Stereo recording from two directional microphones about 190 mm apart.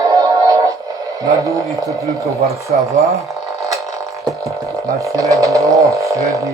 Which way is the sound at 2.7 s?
45° right (ahead or behind).